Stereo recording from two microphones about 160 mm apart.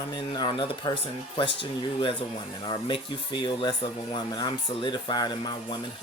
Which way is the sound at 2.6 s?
30° left (ahead or behind).